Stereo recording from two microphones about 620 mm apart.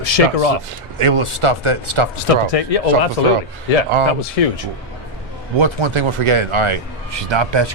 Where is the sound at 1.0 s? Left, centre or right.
Right.